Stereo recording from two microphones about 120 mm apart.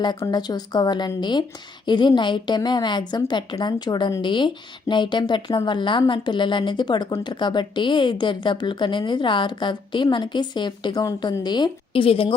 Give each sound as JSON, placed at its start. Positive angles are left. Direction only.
{"t": 0.2, "sound": "speech", "side_deg": 35}
{"t": 12.0, "sound": "a woman's voice", "side_deg": 50}